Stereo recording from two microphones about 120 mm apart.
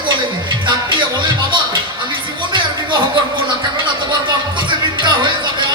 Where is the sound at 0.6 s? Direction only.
40° right (ahead or behind).